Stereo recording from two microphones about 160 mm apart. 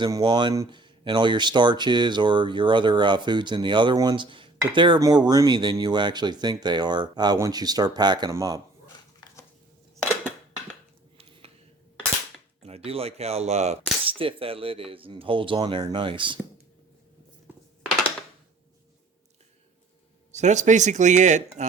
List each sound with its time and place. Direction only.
0.0 s speech: 25° right (ahead or behind)
12.6 s speech: 40° right (ahead or behind)
20.3 s speech: 45° right (ahead or behind)